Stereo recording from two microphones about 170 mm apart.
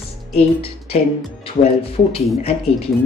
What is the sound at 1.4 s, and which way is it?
Speech, 35° left (ahead or behind).